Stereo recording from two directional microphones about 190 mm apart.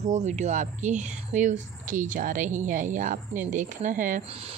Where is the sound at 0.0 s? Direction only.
40° right (ahead or behind).